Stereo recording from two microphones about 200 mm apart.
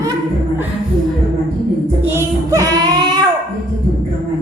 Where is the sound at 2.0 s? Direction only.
15° right (ahead or behind).